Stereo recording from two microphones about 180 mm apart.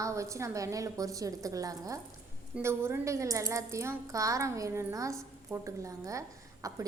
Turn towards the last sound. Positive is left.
turn(degrees=-15)  # may be behind; listen again after turning